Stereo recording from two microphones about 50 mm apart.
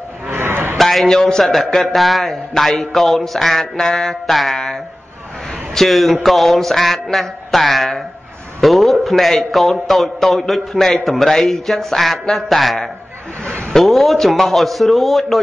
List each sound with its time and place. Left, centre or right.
0.3 s a sound: right
0.7 s a man's voice: centre
5.8 s a man's voice: centre
8.5 s a sound: centre
9.0 s a man's voice: centre
13.7 s a man's voice: centre